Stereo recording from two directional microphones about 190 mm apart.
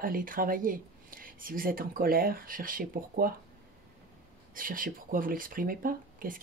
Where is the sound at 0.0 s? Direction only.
45° right (ahead or behind).